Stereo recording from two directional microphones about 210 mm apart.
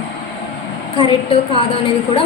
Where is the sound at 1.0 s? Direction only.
25° left (ahead or behind).